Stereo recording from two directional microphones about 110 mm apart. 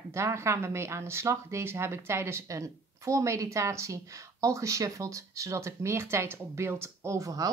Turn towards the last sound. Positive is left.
turn(degrees=-30)  # may be behind; listen again after turning